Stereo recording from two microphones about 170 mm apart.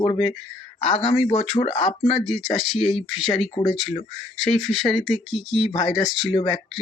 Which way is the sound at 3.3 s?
30° left (ahead or behind).